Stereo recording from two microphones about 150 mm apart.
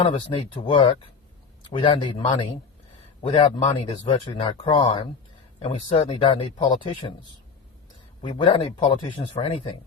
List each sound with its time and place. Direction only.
0.1 s speech: 30° left (ahead or behind)
8.4 s speech: 35° left (ahead or behind)